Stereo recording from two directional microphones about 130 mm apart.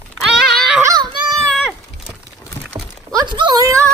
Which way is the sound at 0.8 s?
30° right (ahead or behind).